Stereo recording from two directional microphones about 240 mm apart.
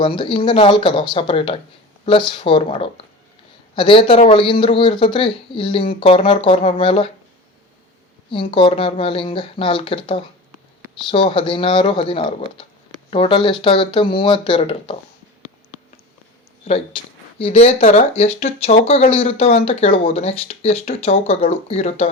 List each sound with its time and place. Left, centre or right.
0.0 s speech: left
8.3 s speech: left
16.6 s speech: left